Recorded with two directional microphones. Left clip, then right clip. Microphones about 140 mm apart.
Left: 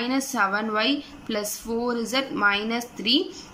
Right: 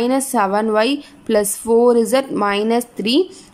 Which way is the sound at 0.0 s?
45° right (ahead or behind).